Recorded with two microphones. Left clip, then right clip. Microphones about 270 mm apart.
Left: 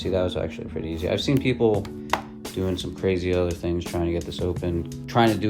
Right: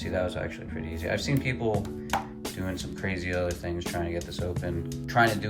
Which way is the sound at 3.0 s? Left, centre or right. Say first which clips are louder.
Left 7 dB; centre.